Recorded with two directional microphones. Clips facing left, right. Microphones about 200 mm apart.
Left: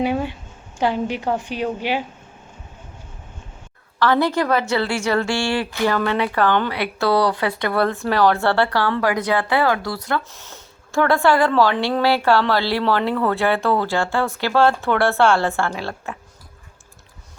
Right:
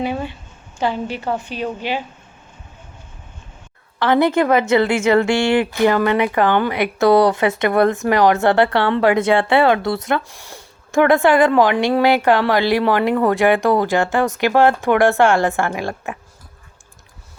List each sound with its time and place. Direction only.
0.0 s a woman's voice: 10° left (ahead or behind)
4.0 s a woman's voice: 20° right (ahead or behind)